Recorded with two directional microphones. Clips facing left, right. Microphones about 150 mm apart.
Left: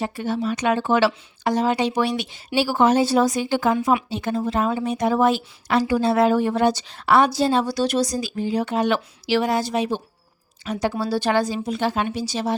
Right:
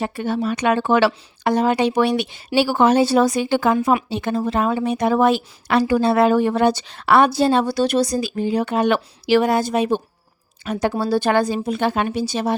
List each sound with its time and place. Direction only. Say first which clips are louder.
0.0 s a woman's voice: right 2 dB; 60° right (ahead or behind)